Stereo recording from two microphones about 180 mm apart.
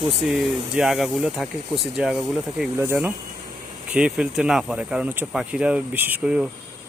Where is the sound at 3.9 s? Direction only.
5° right (ahead or behind).